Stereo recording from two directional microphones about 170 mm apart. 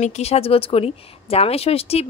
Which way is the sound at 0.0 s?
35° left (ahead or behind).